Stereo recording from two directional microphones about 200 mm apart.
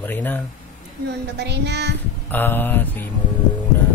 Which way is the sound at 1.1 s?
55° right (ahead or behind).